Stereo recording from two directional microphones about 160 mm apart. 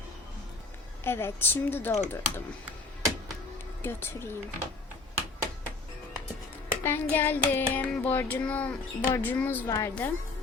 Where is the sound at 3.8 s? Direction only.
15° left (ahead or behind).